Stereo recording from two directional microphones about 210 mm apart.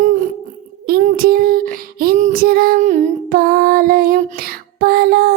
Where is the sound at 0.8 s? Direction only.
45° right (ahead or behind).